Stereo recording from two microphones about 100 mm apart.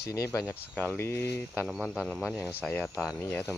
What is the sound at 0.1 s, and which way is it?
Speech, 30° left (ahead or behind).